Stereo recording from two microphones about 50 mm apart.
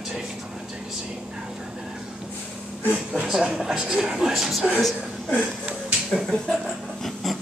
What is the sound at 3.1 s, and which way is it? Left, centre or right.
Speech, centre.